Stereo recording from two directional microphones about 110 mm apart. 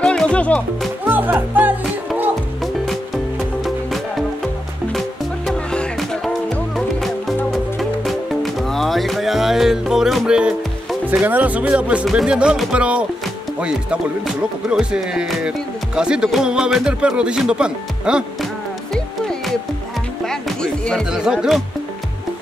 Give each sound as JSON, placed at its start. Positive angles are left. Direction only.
{"t": 0.0, "sound": "music", "side_deg": 5}
{"t": 1.0, "sound": "music", "side_deg": -20}
{"t": 5.5, "sound": "music", "side_deg": 5}
{"t": 13.6, "sound": "speech", "side_deg": -10}
{"t": 20.2, "sound": "music", "side_deg": 5}
{"t": 21.1, "sound": "speech", "side_deg": -5}